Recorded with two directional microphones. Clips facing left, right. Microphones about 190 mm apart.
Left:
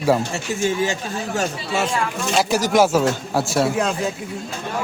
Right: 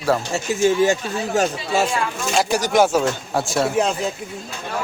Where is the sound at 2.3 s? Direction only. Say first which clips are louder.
Even; centre (ahead or behind).